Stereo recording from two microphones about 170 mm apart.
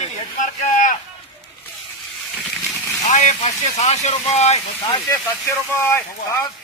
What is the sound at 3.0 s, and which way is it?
A man's voice, 45° left (ahead or behind).